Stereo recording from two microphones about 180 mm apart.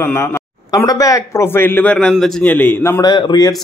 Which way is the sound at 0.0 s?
15° left (ahead or behind).